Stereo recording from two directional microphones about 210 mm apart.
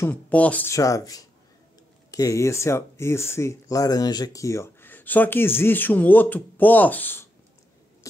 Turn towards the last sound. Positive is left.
turn(degrees=10)  # may be behind; listen again after turning